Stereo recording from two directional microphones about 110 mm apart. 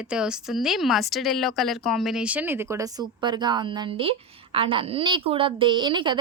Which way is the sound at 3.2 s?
40° right (ahead or behind).